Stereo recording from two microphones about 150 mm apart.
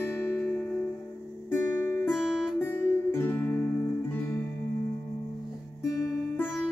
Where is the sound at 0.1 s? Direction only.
15° left (ahead or behind).